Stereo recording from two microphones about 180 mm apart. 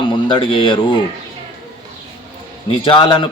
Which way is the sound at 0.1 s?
25° left (ahead or behind).